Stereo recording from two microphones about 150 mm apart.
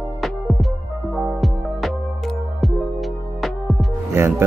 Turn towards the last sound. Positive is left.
turn(degrees=-15)  # may be behind; listen again after turning